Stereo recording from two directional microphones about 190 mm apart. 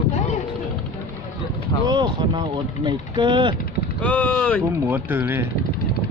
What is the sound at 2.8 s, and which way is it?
Speech, 25° right (ahead or behind).